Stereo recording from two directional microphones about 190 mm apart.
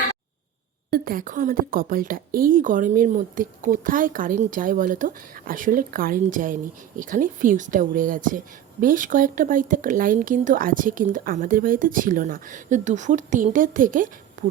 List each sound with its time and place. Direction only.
0.9 s speech: 50° right (ahead or behind)